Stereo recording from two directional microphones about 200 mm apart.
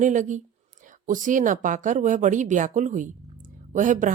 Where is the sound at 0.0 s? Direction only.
40° right (ahead or behind).